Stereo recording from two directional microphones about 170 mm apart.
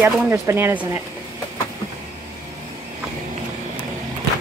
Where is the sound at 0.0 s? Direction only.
15° right (ahead or behind).